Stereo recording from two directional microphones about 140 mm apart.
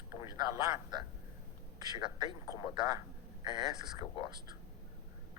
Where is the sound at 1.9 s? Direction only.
30° right (ahead or behind).